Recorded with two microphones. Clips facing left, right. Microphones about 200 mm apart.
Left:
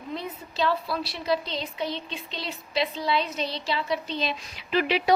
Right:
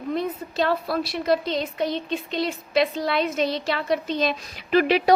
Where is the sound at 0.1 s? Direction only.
50° right (ahead or behind).